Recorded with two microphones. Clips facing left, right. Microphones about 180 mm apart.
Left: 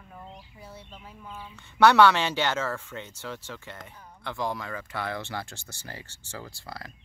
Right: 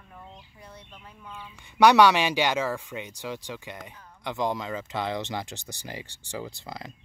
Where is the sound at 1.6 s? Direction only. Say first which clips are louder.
Right 1 dB; 15° right (ahead or behind).